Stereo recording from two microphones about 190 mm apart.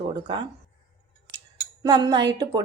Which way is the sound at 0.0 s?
25° right (ahead or behind).